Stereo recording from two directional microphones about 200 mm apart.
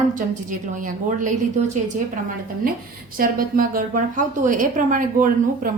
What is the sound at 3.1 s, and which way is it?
A woman's voice, 45° right (ahead or behind).